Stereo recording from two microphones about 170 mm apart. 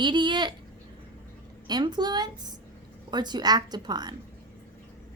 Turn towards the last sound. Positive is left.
turn(degrees=-25)  # may be behind; listen again after turning